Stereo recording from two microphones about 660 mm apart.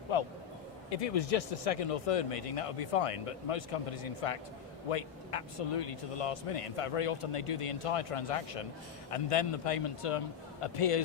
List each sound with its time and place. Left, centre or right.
0.1 s a man's voice: left
0.9 s a man's voice: left